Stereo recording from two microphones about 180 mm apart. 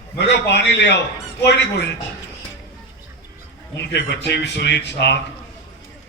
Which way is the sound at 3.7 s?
70° left (ahead or behind).